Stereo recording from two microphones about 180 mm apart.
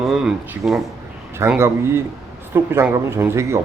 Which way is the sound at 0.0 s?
Centre (ahead or behind).